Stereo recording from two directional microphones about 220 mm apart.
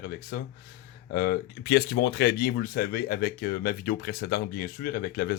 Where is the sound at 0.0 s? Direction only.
45° left (ahead or behind).